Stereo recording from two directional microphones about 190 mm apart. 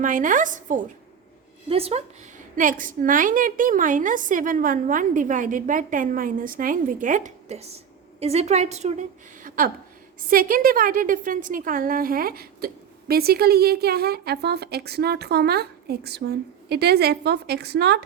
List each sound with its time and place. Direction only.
0.0 s a woman's voice: 45° right (ahead or behind)
1.7 s a woman's voice: 30° right (ahead or behind)
2.6 s a woman's voice: 45° right (ahead or behind); by 18.0 s 60° right (ahead or behind)